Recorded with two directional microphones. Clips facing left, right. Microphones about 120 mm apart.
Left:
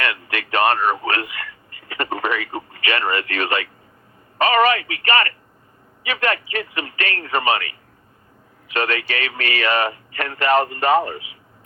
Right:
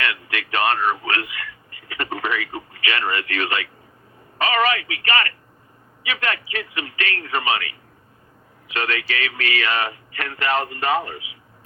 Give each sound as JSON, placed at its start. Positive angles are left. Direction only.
{"t": 0.0, "sound": "speech", "side_deg": 45}
{"t": 1.9, "sound": "radio", "side_deg": 40}
{"t": 4.4, "sound": "speech", "side_deg": 45}
{"t": 8.7, "sound": "speech", "side_deg": 45}